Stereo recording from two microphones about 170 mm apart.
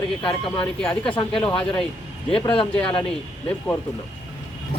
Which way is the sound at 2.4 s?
30° left (ahead or behind).